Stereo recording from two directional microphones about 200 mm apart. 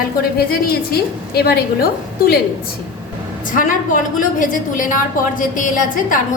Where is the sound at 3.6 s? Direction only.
40° left (ahead or behind).